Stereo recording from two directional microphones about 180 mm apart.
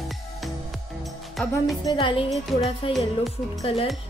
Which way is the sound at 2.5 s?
Centre (ahead or behind).